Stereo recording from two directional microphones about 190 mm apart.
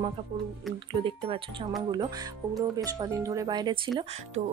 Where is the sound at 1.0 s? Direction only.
25° right (ahead or behind).